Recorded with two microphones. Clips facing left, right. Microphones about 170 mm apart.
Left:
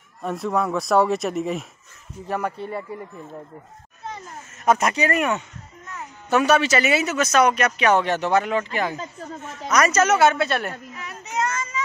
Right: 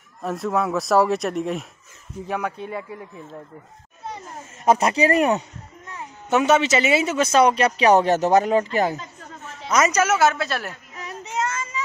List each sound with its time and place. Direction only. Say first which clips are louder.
0.2 s speech: even; centre (ahead or behind)
2.5 s speech: left 1 dB; 10° right (ahead or behind)
4.6 s speech: right 2 dB; 30° right (ahead or behind)
6.3 s speech: even; 20° right (ahead or behind); by 9.0 s 40° right (ahead or behind)
9.2 s snake: left 5 dB; 35° left (ahead or behind)
9.7 s a woman's voice: even; 25° right (ahead or behind)
9.9 s speech: left 2 dB; 5° right (ahead or behind)
11.0 s a sound: right 1 dB; 30° right (ahead or behind)